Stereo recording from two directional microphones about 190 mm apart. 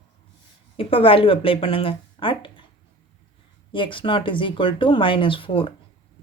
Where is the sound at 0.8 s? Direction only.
30° left (ahead or behind).